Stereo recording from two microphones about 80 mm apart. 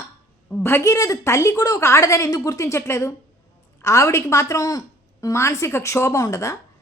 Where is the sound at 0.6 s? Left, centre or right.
Left.